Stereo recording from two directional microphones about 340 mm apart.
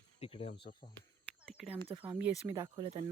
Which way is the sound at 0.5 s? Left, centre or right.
Left.